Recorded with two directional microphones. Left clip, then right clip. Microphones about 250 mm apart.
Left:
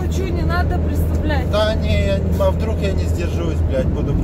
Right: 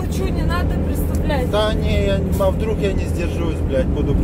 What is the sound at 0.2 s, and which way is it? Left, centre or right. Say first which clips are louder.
Vehicle: left 1 dB; right.